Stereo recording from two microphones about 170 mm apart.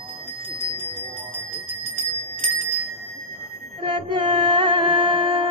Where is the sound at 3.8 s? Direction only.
30° right (ahead or behind).